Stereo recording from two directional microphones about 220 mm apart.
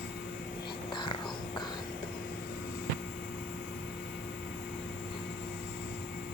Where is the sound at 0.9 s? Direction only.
20° left (ahead or behind).